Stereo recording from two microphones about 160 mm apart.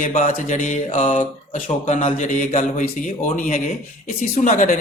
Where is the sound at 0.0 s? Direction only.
50° left (ahead or behind).